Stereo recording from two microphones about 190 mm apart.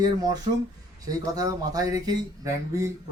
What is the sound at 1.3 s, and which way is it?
Speech, 20° right (ahead or behind).